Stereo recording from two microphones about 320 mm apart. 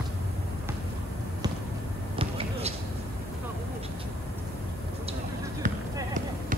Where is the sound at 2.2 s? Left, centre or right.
Centre.